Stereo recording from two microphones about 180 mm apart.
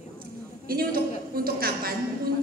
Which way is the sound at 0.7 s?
55° right (ahead or behind).